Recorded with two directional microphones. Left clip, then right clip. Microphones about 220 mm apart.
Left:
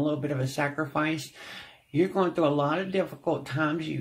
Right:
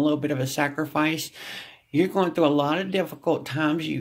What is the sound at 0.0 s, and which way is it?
Speech, 40° right (ahead or behind).